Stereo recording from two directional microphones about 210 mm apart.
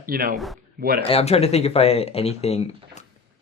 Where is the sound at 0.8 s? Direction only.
45° right (ahead or behind).